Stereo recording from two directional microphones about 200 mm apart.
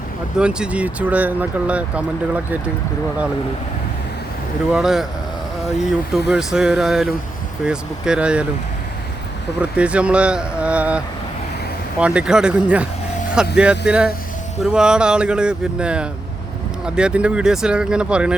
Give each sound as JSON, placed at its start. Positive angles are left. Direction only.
{"t": 0.3, "sound": "speech", "side_deg": -5}
{"t": 4.7, "sound": "speech", "side_deg": 0}
{"t": 6.1, "sound": "speech", "side_deg": 0}
{"t": 9.6, "sound": "speech", "side_deg": -5}